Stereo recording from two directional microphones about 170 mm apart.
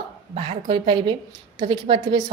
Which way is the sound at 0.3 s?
35° right (ahead or behind).